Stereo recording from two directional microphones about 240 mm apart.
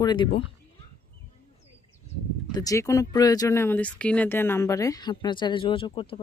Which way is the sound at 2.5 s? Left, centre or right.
Centre.